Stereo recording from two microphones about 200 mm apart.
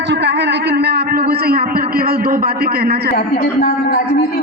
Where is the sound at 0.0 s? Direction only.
60° right (ahead or behind).